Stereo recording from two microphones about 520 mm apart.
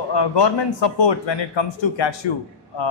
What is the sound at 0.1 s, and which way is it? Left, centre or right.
A man's voice, left.